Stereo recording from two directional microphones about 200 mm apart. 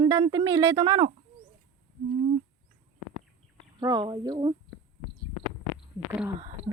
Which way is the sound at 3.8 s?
20° right (ahead or behind).